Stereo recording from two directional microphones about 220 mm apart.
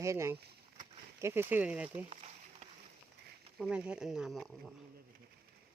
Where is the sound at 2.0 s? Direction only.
30° right (ahead or behind).